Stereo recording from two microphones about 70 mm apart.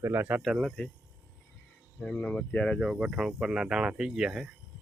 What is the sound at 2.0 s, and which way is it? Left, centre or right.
Speech, centre.